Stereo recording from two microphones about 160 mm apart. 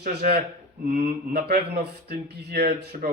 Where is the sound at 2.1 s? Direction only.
75° right (ahead or behind).